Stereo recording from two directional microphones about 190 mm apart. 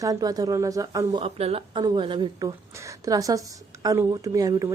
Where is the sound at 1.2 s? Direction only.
30° right (ahead or behind).